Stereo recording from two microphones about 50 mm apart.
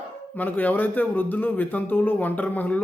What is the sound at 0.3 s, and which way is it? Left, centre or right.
A man's voice, left.